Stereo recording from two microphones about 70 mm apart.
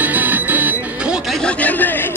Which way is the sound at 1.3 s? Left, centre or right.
Centre.